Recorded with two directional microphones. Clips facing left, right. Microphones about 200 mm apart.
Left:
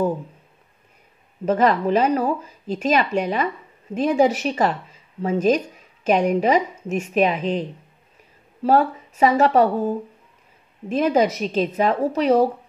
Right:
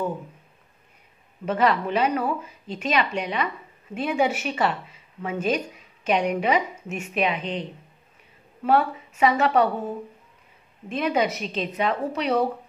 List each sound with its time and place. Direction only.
1.4 s speech: 40° left (ahead or behind)
8.6 s speech: 40° left (ahead or behind)